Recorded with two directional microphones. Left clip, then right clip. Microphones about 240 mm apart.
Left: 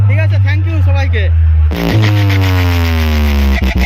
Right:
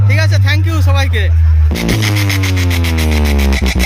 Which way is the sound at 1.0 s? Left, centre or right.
Centre.